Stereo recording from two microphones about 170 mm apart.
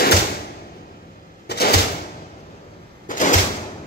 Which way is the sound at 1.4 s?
70° left (ahead or behind).